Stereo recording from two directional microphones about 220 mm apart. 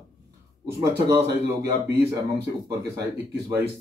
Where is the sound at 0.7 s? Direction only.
15° right (ahead or behind).